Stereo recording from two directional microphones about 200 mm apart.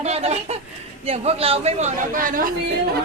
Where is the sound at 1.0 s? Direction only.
30° right (ahead or behind).